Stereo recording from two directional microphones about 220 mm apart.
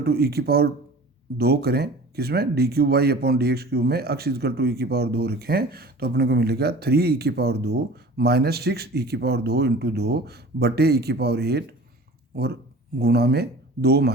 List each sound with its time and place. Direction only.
0.0 s speech: 45° right (ahead or behind)
13.0 s speech: 45° right (ahead or behind)